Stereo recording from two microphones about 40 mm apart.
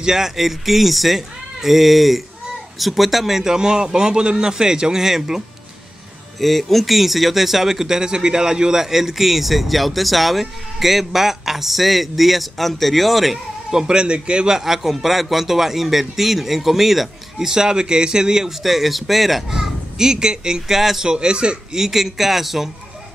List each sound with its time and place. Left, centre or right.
0.0 s a man's voice: centre
6.4 s speech: centre
13.7 s a man's voice: centre
14.5 s a man's voice: centre
21.1 s a man's voice: right
21.7 s a man's voice: centre